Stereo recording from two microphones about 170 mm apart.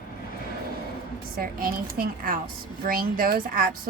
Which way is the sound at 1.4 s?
60° right (ahead or behind).